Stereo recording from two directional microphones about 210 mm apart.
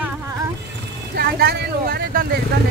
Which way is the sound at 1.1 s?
50° right (ahead or behind).